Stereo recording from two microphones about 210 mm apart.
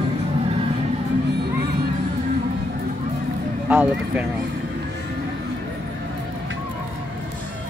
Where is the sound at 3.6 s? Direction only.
5° right (ahead or behind).